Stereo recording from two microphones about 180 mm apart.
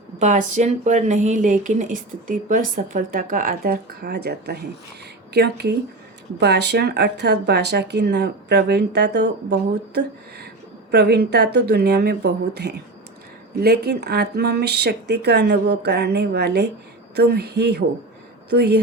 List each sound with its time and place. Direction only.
0.2 s a woman's voice: 45° right (ahead or behind); by 18.8 s 65° right (ahead or behind)